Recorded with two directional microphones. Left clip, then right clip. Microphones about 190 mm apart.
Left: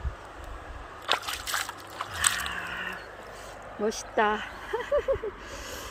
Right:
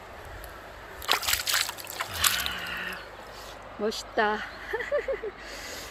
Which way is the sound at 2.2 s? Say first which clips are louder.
Right 1 dB; 20° right (ahead or behind).